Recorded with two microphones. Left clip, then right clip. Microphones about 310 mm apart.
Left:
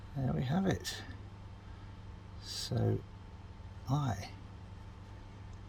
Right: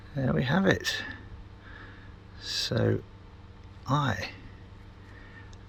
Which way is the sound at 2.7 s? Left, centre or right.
Centre.